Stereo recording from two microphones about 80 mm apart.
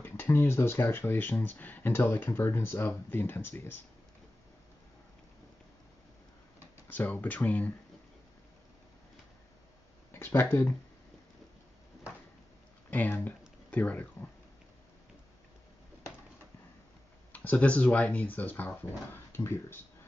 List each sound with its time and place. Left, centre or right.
0.0 s speech: left
6.9 s speech: left
10.1 s speech: left
12.9 s speech: left
17.3 s speech: centre